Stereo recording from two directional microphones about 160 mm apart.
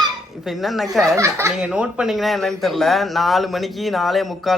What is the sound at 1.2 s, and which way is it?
Speech, 15° right (ahead or behind).